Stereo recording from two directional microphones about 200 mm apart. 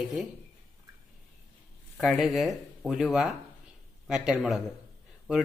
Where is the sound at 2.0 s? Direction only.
Centre (ahead or behind).